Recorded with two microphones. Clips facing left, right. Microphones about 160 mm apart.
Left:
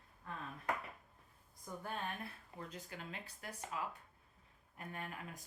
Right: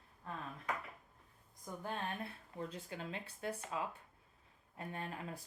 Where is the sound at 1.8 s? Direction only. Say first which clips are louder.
Right 2 dB; 30° right (ahead or behind).